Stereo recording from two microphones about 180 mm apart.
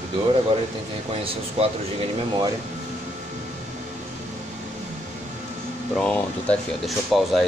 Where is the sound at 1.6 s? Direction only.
35° right (ahead or behind).